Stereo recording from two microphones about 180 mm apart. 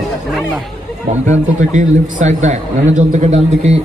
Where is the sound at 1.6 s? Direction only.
45° right (ahead or behind).